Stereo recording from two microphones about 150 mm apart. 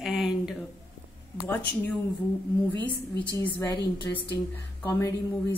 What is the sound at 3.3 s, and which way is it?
A woman's voice, 25° left (ahead or behind).